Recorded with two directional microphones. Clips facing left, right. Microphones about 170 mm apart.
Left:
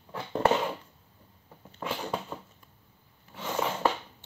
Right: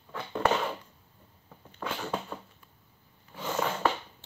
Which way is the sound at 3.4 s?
5° left (ahead or behind).